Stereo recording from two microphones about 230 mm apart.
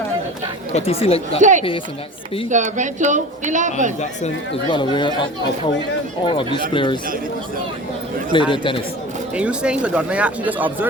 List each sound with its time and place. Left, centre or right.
0.7 s speech: left
1.4 s speech: right
4.7 s speech: centre
8.3 s speech: left
9.3 s speech: centre